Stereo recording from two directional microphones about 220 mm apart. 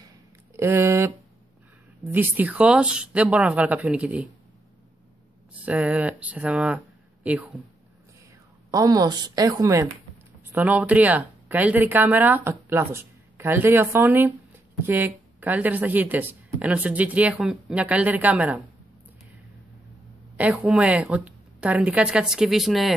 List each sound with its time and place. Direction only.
0.0 s a sound: 10° right (ahead or behind)
2.0 s a woman's voice: 10° right (ahead or behind)
5.5 s a woman's voice: 5° right (ahead or behind)
8.6 s speech: 15° right (ahead or behind)
20.3 s a woman's voice: 5° right (ahead or behind)